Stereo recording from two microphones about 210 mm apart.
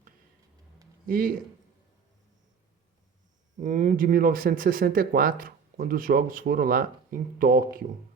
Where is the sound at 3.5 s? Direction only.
35° right (ahead or behind).